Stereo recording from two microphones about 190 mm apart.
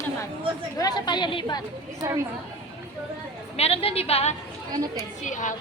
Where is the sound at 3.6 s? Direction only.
30° left (ahead or behind).